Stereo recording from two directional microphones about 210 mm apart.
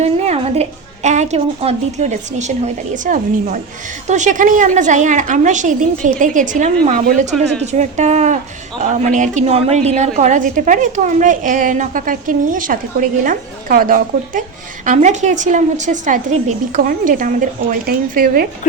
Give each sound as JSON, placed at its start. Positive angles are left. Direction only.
{"t": 0.0, "sound": "a woman's voice", "side_deg": -30}